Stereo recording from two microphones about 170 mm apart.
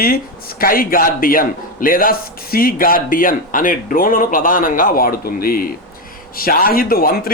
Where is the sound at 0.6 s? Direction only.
55° left (ahead or behind).